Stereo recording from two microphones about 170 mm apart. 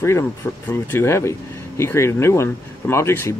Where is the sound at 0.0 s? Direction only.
15° left (ahead or behind).